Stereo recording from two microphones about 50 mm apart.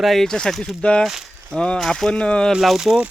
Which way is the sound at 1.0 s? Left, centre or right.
Centre.